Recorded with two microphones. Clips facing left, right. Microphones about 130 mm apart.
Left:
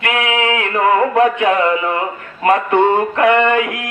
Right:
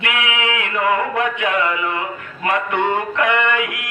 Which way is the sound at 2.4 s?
35° left (ahead or behind).